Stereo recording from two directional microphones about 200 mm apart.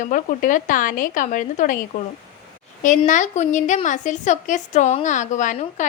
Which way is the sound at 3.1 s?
35° left (ahead or behind).